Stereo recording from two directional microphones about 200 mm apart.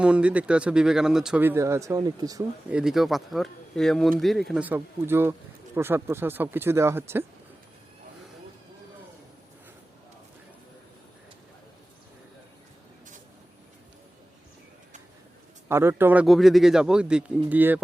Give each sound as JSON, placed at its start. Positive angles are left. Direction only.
{"t": 0.0, "sound": "speech", "side_deg": -5}
{"t": 2.6, "sound": "speech", "side_deg": -5}
{"t": 15.7, "sound": "speech", "side_deg": -10}
{"t": 16.2, "sound": "speech", "side_deg": 0}